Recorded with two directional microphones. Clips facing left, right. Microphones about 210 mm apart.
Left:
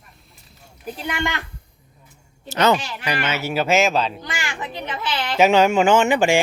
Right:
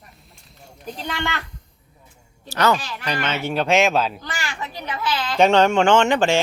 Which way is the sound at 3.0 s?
10° left (ahead or behind).